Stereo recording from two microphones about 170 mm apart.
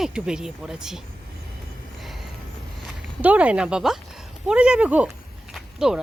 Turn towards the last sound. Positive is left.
turn(degrees=-5)  # may be behind; listen again after turning